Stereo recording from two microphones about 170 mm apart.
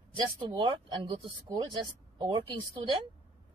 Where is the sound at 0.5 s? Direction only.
30° right (ahead or behind).